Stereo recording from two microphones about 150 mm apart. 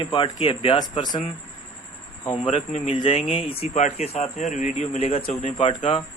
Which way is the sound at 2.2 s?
35° left (ahead or behind).